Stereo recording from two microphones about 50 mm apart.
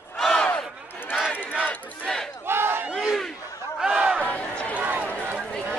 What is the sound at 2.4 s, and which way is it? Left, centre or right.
Battle cry, right.